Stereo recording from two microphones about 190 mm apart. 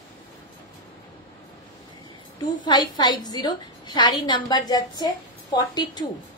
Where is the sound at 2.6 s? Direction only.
20° left (ahead or behind).